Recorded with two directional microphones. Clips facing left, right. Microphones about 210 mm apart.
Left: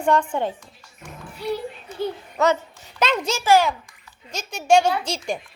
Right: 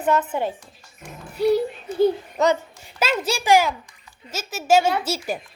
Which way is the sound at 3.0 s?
10° right (ahead or behind).